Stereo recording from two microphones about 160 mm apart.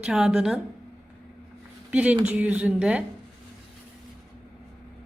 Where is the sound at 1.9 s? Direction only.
10° right (ahead or behind).